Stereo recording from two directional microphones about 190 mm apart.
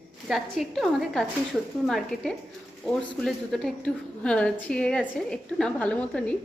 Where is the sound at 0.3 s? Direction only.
Centre (ahead or behind).